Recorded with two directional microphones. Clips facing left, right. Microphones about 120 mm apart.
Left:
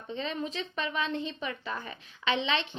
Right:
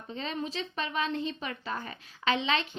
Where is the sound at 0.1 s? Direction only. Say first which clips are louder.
Left 1 dB; 35° right (ahead or behind).